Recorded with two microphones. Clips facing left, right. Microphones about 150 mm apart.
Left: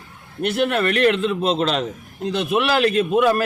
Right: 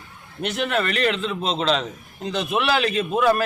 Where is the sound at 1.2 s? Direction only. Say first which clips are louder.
Left 5 dB; 5° left (ahead or behind).